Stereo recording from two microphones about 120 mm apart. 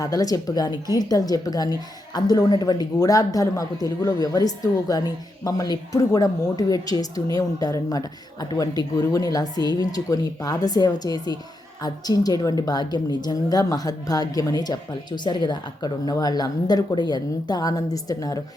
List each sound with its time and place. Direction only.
0.0 s speech: 30° left (ahead or behind)